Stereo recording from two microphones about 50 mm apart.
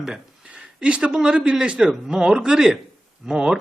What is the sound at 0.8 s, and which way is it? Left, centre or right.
Speech, right.